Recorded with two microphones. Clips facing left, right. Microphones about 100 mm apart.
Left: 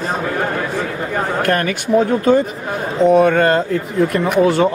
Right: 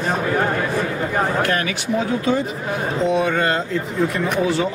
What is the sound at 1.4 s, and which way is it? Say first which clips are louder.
Speech: left 4 dB; 50° left (ahead or behind).